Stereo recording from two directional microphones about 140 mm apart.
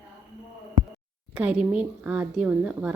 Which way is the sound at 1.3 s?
5° right (ahead or behind).